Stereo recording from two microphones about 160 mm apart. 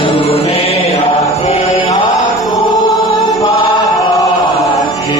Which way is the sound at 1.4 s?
35° left (ahead or behind).